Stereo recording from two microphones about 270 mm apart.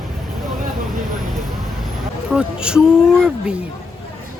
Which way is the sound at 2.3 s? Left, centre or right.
Centre.